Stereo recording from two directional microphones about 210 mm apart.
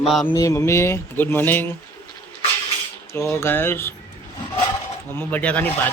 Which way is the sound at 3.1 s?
15° left (ahead or behind).